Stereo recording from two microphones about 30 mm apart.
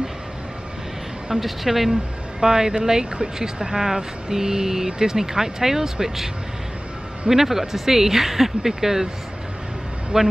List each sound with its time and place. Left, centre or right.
1.4 s speech: centre
2.4 s speech: centre
10.1 s speech: right